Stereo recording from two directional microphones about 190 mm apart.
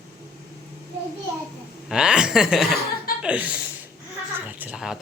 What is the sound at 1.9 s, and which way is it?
A woman's voice, 5° right (ahead or behind).